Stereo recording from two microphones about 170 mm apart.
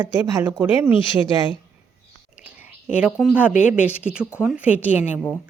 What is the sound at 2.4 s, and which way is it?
A woman's voice, 10° right (ahead or behind).